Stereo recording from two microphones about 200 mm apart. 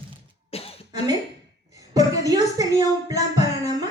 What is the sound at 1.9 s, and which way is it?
A woman's voice, 15° right (ahead or behind).